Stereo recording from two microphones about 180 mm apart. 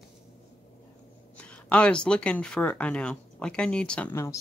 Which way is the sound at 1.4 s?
5° left (ahead or behind).